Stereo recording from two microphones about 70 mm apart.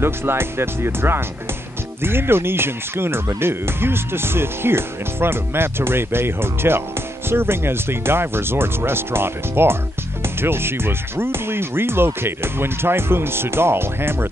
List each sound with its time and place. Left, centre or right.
0.0 s speech: right